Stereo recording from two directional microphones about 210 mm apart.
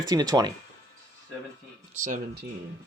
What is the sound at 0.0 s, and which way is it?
Speech, 20° right (ahead or behind).